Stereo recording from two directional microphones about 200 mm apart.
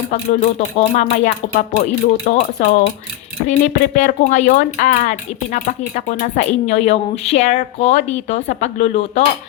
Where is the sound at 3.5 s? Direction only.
40° left (ahead or behind).